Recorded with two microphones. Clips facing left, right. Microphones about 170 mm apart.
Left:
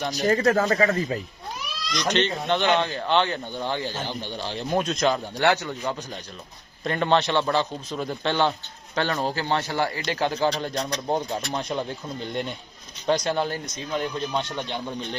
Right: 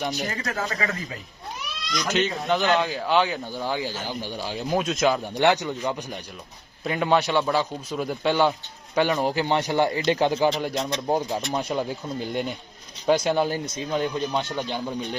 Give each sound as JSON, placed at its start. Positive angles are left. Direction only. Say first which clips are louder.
{"t": 0.1, "sound": "speech", "louder": "left 9 dB", "side_deg": 40}
{"t": 2.1, "sound": "speech", "louder": "right 1 dB", "side_deg": -5}
{"t": 5.4, "sound": "speech", "louder": "right 2 dB", "side_deg": -15}